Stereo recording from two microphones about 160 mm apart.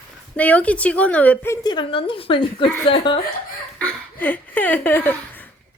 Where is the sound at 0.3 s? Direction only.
10° left (ahead or behind).